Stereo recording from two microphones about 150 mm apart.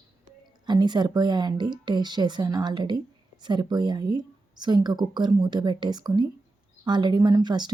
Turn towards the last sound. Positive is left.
turn(degrees=-30)  # may be behind; listen again after turning